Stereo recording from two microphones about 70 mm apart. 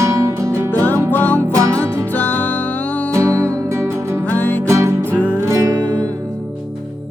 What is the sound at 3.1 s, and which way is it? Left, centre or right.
Music, right.